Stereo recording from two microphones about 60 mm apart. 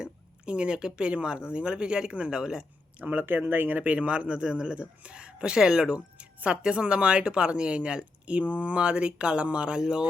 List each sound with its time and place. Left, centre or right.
0.0 s speech: centre
3.0 s speech: right; by 10.1 s centre